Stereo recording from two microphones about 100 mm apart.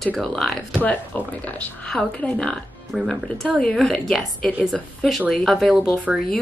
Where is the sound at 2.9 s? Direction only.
5° right (ahead or behind).